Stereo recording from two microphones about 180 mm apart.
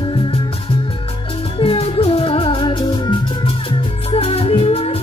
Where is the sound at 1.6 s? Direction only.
30° left (ahead or behind).